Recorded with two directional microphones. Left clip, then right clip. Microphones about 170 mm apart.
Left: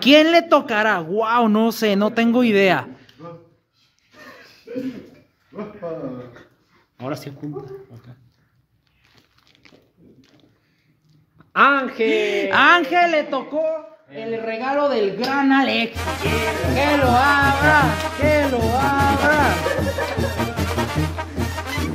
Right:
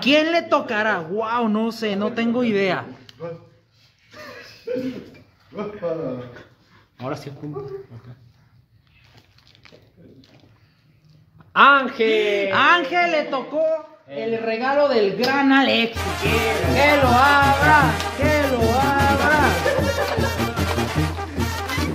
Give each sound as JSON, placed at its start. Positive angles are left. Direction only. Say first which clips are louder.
{"t": 0.0, "sound": "a man's voice", "louder": "left 5 dB", "side_deg": 75}
{"t": 7.0, "sound": "speech", "louder": "left 1 dB", "side_deg": 85}
{"t": 11.5, "sound": "speech", "louder": "right 2 dB", "side_deg": 35}
{"t": 12.1, "sound": "a man's voice", "louder": "left 1 dB", "side_deg": 55}
{"t": 13.3, "sound": "speech", "louder": "even", "side_deg": 45}
{"t": 14.1, "sound": "speech", "louder": "right 2 dB", "side_deg": 30}
{"t": 15.9, "sound": "music", "louder": "right 1 dB", "side_deg": 0}